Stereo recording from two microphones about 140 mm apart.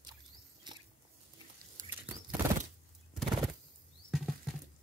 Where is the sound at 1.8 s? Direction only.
65° right (ahead or behind).